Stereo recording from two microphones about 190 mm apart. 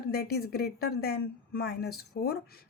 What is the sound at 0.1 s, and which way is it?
A woman's voice, 55° left (ahead or behind).